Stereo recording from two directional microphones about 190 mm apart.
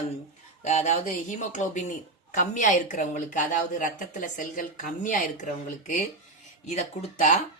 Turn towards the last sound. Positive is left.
turn(degrees=35)  # may be behind; listen again after turning